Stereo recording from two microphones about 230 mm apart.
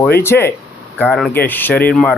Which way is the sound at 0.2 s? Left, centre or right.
Centre.